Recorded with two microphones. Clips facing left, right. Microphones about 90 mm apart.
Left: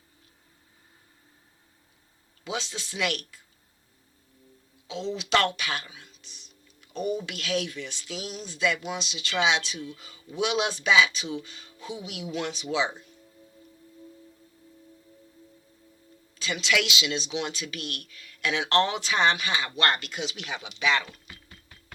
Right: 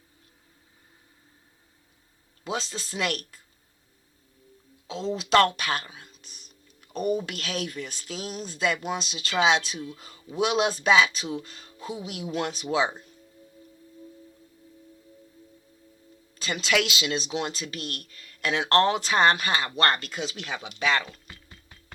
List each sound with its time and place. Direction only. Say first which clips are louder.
2.4 s speech: right 2 dB; 45° right (ahead or behind)
4.9 s speech: right 2 dB; 45° right (ahead or behind)
16.3 s speech: right 1 dB; 45° right (ahead or behind)